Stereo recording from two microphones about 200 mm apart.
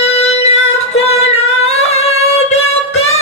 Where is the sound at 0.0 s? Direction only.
30° left (ahead or behind).